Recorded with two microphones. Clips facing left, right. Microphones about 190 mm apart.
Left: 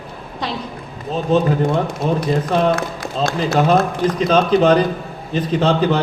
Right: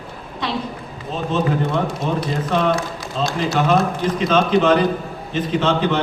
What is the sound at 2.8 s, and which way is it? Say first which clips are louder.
Speech: left 2 dB; 55° left (ahead or behind).